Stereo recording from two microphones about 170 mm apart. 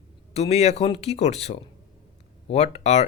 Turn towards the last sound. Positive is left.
turn(degrees=40)  # may be behind; listen again after turning